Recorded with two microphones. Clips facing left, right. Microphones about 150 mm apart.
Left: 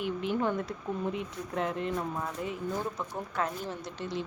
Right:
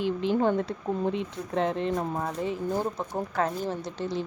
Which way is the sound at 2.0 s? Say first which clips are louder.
Right 4 dB; 40° right (ahead or behind).